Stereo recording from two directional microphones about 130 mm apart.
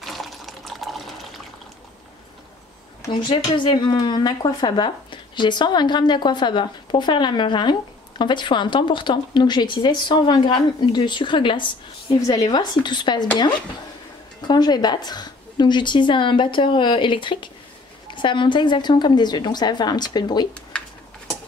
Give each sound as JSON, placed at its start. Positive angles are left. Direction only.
{"t": 0.0, "sound": "water", "side_deg": 0}
{"t": 3.1, "sound": "speech", "side_deg": 35}
{"t": 14.5, "sound": "speech", "side_deg": 35}